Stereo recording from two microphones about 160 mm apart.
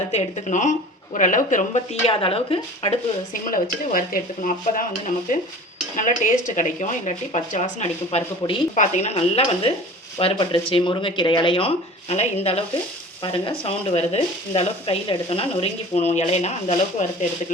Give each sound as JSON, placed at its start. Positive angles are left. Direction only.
{"t": 0.1, "sound": "a woman's voice", "side_deg": 45}
{"t": 3.4, "sound": "stir", "side_deg": 60}
{"t": 6.0, "sound": "a woman's voice", "side_deg": 55}